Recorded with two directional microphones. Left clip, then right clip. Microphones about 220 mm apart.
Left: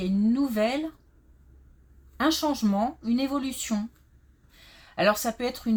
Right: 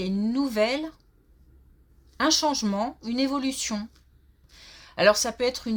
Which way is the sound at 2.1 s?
40° right (ahead or behind).